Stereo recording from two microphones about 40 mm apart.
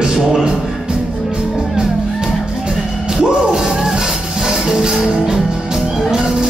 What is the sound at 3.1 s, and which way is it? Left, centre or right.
Music, centre.